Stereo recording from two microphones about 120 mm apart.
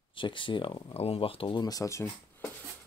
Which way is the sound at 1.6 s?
30° left (ahead or behind).